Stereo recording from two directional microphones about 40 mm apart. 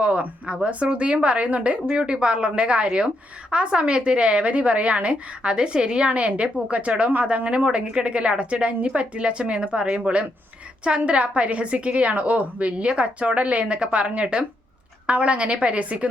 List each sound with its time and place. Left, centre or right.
0.4 s a woman's voice: right